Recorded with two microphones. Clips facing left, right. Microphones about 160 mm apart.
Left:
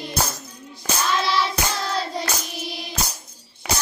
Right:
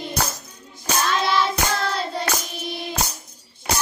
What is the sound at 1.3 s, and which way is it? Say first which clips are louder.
Hands: right 2 dB; 55° right (ahead or behind).